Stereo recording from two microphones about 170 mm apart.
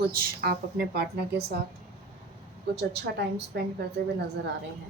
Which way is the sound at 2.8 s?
80° right.